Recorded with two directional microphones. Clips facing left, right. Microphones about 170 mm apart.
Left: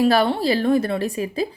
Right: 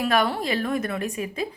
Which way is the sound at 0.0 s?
30° left (ahead or behind).